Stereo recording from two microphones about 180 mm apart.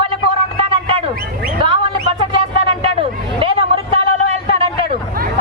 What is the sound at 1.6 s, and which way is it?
Hubbub, 30° right (ahead or behind).